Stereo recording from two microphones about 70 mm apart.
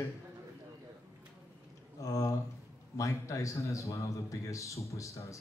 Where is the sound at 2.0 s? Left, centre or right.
Left.